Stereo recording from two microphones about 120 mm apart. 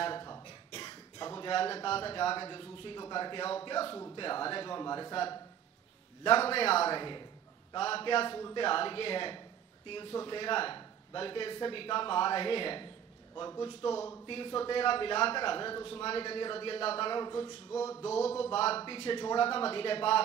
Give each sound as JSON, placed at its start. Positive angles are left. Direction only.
{"t": 0.0, "sound": "cough", "side_deg": 40}
{"t": 1.5, "sound": "a man's voice", "side_deg": 50}
{"t": 6.2, "sound": "a man's voice", "side_deg": 55}
{"t": 7.0, "sound": "a man's voice", "side_deg": 40}
{"t": 18.0, "sound": "a man's voice", "side_deg": 60}